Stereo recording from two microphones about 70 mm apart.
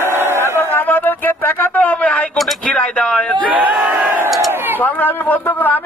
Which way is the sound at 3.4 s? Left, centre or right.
Centre.